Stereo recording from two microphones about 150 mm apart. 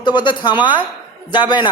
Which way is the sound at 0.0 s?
30° left (ahead or behind).